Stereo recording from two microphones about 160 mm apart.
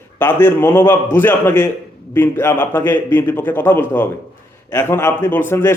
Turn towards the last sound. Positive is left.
turn(degrees=15)  # may be behind; listen again after turning